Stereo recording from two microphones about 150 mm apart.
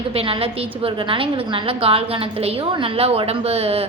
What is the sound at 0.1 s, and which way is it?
A woman's voice, 40° right (ahead or behind).